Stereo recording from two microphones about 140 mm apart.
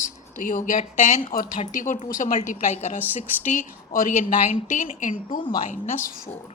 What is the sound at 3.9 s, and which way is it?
A woman's voice, 75° left (ahead or behind).